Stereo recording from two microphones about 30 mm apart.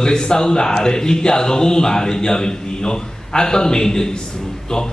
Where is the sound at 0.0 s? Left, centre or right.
Left.